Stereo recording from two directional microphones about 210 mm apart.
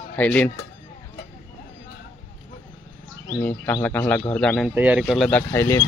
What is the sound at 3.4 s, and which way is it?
Speech, 10° left (ahead or behind).